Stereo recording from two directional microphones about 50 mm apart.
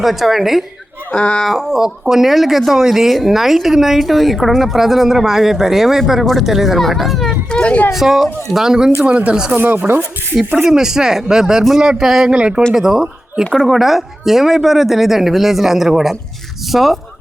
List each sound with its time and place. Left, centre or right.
0.0 s speech: centre
1.1 s speech: centre
1.5 s speech: centre
7.5 s speech: left
7.9 s speech: centre
9.0 s speech: right
9.6 s speech: right
10.7 s speech: centre
12.3 s speech: centre